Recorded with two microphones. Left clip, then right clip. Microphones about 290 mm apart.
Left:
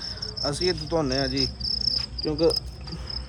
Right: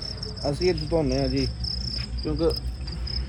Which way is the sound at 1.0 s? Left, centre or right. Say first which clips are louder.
Even; centre.